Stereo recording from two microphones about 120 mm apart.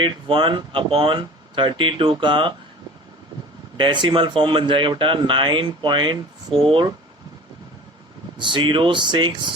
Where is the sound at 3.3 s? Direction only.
50° right (ahead or behind).